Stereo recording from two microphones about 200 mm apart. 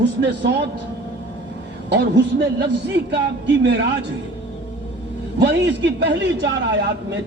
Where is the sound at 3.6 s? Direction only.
65° right (ahead or behind).